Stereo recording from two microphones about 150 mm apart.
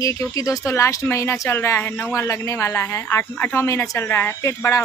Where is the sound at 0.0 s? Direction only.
20° left (ahead or behind).